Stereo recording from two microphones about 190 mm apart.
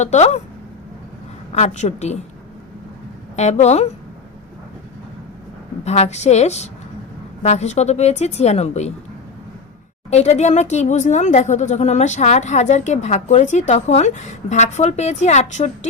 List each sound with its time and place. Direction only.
0.0 s speech: 35° left (ahead or behind)
1.5 s speech: 35° left (ahead or behind)
3.3 s speech: 35° left (ahead or behind)
5.8 s speech: 35° left (ahead or behind)
10.1 s speech: 35° left (ahead or behind)